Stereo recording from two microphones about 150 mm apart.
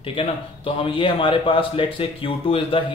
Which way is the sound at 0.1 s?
35° left (ahead or behind).